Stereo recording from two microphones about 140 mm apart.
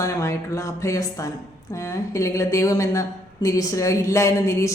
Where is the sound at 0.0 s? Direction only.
20° left (ahead or behind).